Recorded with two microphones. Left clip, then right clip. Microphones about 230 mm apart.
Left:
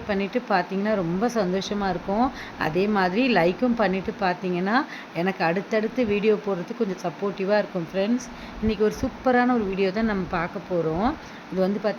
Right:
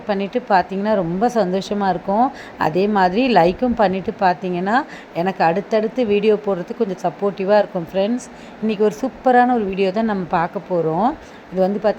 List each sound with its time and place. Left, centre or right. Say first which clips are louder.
0.1 s a woman's voice: right 7 dB; centre
11.6 s a woman's voice: right 7 dB; centre